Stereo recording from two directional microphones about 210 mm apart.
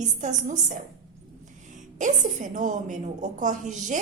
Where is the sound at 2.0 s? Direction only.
35° right (ahead or behind).